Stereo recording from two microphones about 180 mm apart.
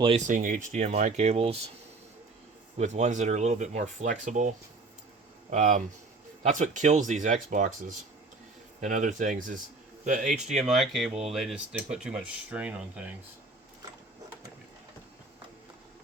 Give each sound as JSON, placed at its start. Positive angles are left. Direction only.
{"t": 0.3, "sound": "speech", "side_deg": -45}
{"t": 2.7, "sound": "speech", "side_deg": -40}
{"t": 10.6, "sound": "speech", "side_deg": 0}
{"t": 11.1, "sound": "speech", "side_deg": -35}
{"t": 11.3, "sound": "speech", "side_deg": -5}